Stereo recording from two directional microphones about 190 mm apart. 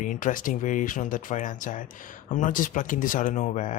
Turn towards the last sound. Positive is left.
turn(degrees=40)  # may be behind; listen again after turning